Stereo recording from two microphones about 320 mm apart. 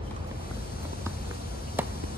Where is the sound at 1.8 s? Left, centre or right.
Centre.